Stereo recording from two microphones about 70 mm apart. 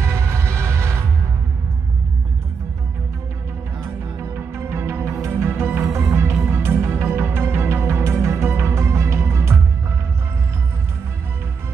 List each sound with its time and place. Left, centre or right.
0.0 s music: right
3.8 s music: right